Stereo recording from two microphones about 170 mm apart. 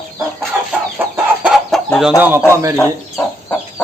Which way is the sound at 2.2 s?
10° right (ahead or behind).